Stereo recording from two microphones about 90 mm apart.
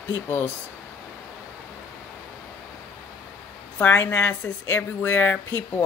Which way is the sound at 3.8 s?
25° left (ahead or behind).